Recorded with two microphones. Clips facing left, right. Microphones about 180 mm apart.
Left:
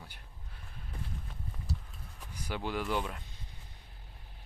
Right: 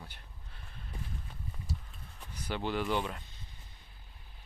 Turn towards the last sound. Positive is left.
turn(degrees=5)  # may be behind; listen again after turning